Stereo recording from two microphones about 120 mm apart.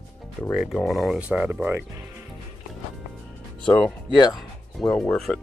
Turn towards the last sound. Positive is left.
turn(degrees=5)  # may be behind; listen again after turning